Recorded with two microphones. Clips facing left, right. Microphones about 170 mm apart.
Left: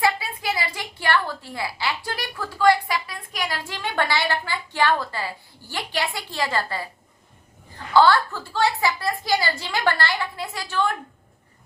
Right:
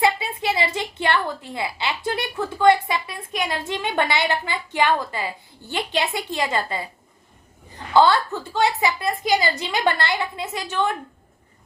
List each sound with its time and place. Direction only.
0.0 s a woman's voice: 25° right (ahead or behind)